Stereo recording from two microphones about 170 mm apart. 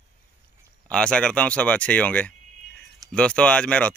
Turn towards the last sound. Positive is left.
turn(degrees=5)  # may be behind; listen again after turning